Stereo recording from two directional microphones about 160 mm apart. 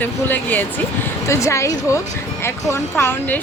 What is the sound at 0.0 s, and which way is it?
A woman's voice, 10° left (ahead or behind).